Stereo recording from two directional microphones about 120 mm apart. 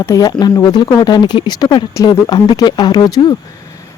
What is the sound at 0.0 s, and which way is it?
Speech, 30° left (ahead or behind).